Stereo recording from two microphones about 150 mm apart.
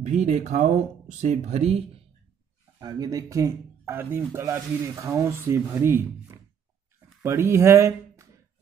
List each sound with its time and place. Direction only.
0.0 s speech: 50° right (ahead or behind)
2.8 s speech: 25° right (ahead or behind)